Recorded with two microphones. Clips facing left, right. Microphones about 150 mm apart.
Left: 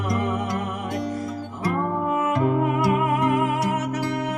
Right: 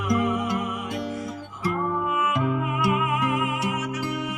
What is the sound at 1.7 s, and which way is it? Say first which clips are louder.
Music: left 2 dB; 40° left (ahead or behind).